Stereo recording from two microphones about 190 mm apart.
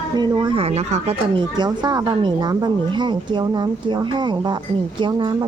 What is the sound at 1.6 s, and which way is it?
A woman's voice, 20° right (ahead or behind).